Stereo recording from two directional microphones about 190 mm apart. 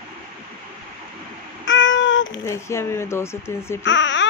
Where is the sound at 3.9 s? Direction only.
70° left (ahead or behind).